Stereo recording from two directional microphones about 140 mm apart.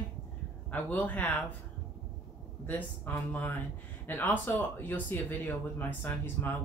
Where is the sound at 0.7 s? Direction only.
10° left (ahead or behind).